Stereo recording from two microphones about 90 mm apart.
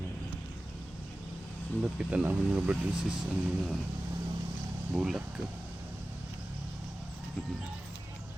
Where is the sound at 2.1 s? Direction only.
15° right (ahead or behind).